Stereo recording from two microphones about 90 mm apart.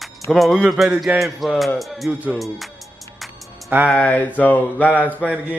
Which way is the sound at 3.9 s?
15° left (ahead or behind).